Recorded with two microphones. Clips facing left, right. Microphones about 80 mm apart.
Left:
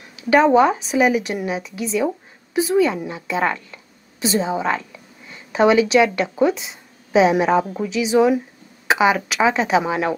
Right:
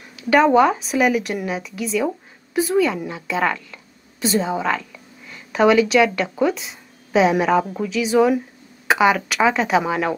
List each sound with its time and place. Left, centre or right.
0.3 s a woman's voice: centre
4.2 s a woman's voice: centre
4.9 s a sound: centre
6.1 s a woman's voice: centre